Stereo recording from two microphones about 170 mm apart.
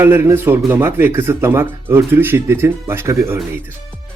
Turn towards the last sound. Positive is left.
turn(degrees=-15)  # may be behind; listen again after turning